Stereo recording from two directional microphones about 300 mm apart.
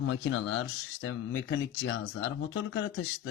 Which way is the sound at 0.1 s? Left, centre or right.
Left.